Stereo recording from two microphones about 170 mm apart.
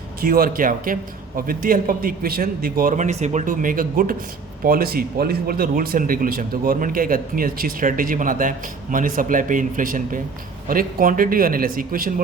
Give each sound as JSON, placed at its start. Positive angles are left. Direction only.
{"t": 0.2, "sound": "speech", "side_deg": -60}